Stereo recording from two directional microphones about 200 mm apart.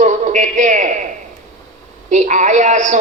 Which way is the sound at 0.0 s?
40° right (ahead or behind).